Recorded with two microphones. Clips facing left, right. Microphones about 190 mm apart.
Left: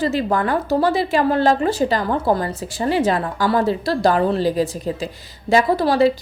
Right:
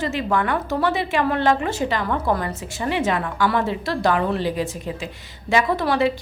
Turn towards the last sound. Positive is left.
turn(degrees=35)  # may be behind; listen again after turning